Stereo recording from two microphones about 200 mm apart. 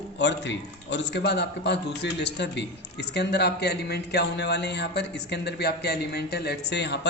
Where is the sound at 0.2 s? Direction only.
60° left (ahead or behind).